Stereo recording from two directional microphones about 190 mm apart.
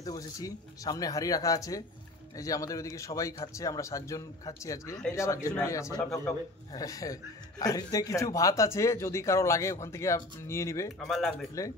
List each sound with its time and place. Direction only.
0.0 s speech: 20° left (ahead or behind)
5.9 s a man's voice: 5° left (ahead or behind)
6.7 s speech: 20° left (ahead or behind)
11.1 s a man's voice: centre (ahead or behind)
11.6 s speech: 15° left (ahead or behind)